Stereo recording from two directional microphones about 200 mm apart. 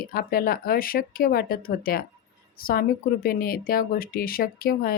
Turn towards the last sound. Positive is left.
turn(degrees=50)  # may be behind; listen again after turning